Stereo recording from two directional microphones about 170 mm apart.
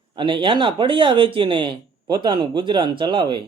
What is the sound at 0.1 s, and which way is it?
A man's voice, 30° right (ahead or behind).